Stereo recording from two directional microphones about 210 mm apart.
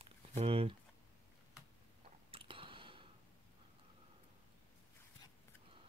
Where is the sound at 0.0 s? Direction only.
25° right (ahead or behind).